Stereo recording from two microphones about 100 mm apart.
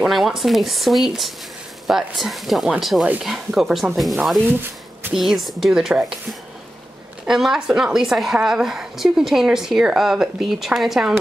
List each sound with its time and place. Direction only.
0.0 s a woman's voice: 5° right (ahead or behind)
4.5 s speech: 20° right (ahead or behind)
5.1 s a woman's voice: centre (ahead or behind)
7.2 s a woman's voice: 5° right (ahead or behind)